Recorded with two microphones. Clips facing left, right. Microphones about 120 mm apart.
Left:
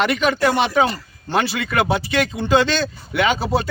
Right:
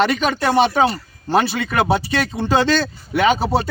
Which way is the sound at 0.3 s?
30° right (ahead or behind).